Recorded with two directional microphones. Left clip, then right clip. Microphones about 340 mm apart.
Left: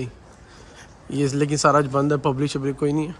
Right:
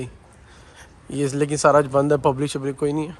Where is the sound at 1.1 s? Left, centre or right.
Centre.